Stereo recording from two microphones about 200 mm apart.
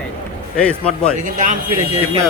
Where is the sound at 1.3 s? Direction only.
40° right (ahead or behind).